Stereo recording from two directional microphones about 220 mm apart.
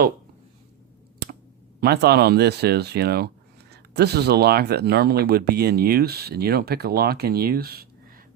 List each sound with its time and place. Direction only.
1.8 s speech: 45° right (ahead or behind)